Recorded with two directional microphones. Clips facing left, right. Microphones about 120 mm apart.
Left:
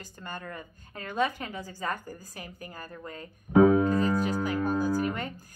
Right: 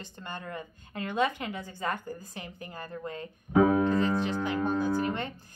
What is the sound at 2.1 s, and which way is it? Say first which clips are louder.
A woman's voice: right 2 dB; 25° right (ahead or behind).